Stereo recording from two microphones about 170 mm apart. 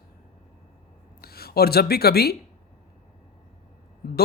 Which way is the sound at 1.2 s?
65° left (ahead or behind).